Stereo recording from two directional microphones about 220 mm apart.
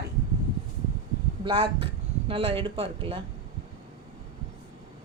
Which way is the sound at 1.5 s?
20° right (ahead or behind).